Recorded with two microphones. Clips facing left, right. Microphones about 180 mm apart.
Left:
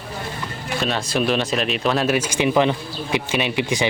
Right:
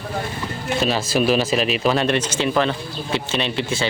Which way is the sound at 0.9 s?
5° right (ahead or behind).